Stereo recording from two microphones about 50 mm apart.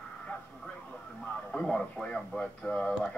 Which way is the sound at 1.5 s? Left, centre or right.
Centre.